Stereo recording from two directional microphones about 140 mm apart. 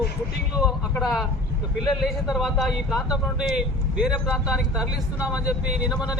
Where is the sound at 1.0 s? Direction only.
Centre (ahead or behind).